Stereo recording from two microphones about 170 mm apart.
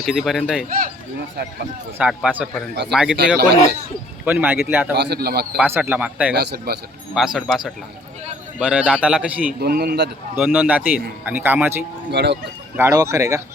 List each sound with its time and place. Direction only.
0.0 s a man's voice: centre (ahead or behind)
2.0 s a man's voice: 10° right (ahead or behind)
3.3 s a man's voice: 70° right (ahead or behind)
4.3 s a man's voice: 10° right (ahead or behind)
4.9 s a man's voice: 75° right (ahead or behind)
5.5 s a man's voice: 10° right (ahead or behind)
6.3 s a man's voice: 70° right (ahead or behind)
7.3 s a man's voice: centre (ahead or behind)
9.5 s a man's voice: 65° right (ahead or behind)
10.3 s a man's voice: 10° right (ahead or behind)
12.1 s speech: 85° right
12.7 s a man's voice: 15° right (ahead or behind)